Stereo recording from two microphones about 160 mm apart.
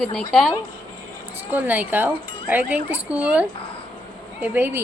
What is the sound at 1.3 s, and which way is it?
Speech, 10° right (ahead or behind).